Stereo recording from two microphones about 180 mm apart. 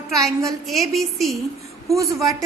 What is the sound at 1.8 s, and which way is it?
Speech, 15° right (ahead or behind).